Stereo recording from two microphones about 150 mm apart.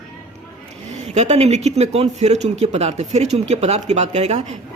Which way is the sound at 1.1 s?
50° right (ahead or behind).